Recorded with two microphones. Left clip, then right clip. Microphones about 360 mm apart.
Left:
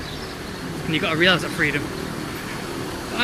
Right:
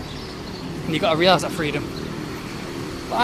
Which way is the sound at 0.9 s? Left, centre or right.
Centre.